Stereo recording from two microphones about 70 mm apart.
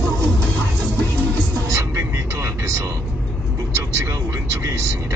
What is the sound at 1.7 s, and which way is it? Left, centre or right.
Vehicle, right.